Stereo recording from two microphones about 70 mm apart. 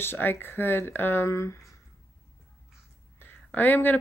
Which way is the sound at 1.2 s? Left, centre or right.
Left.